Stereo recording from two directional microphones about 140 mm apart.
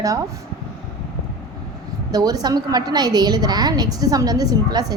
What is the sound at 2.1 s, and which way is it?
A woman's voice, 25° right (ahead or behind).